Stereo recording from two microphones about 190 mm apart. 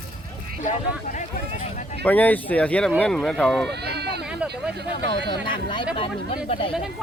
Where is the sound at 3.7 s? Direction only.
60° right (ahead or behind).